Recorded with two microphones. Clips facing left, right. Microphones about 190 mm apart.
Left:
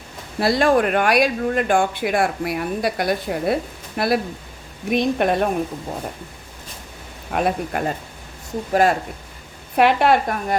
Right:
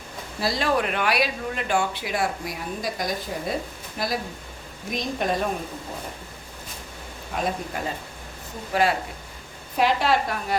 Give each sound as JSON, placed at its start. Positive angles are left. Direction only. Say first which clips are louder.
{"t": 0.3, "sound": "speech", "louder": "left 7 dB", "side_deg": 55}
{"t": 7.3, "sound": "speech", "louder": "left 6 dB", "side_deg": 60}
{"t": 8.7, "sound": "speech", "louder": "left 5 dB", "side_deg": 45}
{"t": 9.7, "sound": "speech", "louder": "left 6 dB", "side_deg": 60}